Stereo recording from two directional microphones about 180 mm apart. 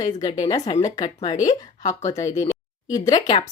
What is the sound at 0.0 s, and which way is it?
Speech, 25° left (ahead or behind).